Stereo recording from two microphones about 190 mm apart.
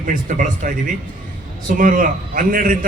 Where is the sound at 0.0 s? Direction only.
45° right (ahead or behind).